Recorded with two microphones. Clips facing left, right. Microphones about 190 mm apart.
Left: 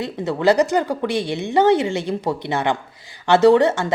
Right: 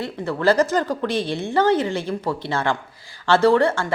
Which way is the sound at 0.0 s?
15° left (ahead or behind).